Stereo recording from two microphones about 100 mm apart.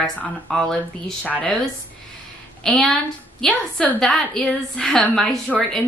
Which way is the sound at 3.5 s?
15° left (ahead or behind).